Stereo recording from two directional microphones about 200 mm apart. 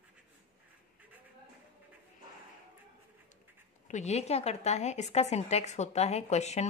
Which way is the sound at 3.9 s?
35° left (ahead or behind).